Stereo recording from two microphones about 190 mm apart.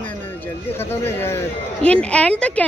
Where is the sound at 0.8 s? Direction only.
10° left (ahead or behind).